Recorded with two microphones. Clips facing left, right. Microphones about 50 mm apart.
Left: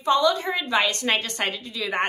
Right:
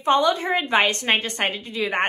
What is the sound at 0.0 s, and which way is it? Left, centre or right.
A woman's voice, right.